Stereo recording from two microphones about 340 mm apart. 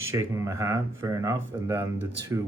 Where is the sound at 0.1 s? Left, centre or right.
Centre.